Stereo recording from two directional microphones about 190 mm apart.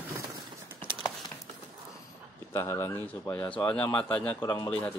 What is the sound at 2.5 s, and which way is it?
A man's voice, 15° left (ahead or behind).